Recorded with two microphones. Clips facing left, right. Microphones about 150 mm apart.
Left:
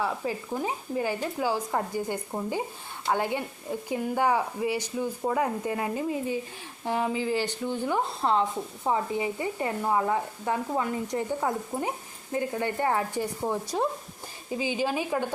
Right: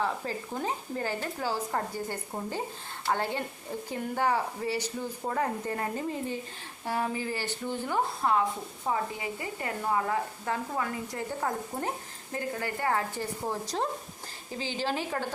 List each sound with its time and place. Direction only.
0.0 s speech: 10° left (ahead or behind)
13.7 s speech: 5° left (ahead or behind)